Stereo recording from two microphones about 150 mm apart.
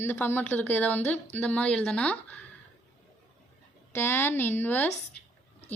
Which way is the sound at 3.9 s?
15° left (ahead or behind).